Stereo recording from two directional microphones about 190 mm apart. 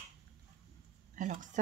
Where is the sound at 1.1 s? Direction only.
40° right (ahead or behind).